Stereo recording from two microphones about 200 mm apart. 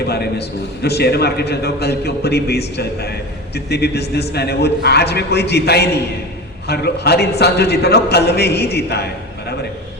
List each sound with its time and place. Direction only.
0.0 s a man's voice: 55° left (ahead or behind)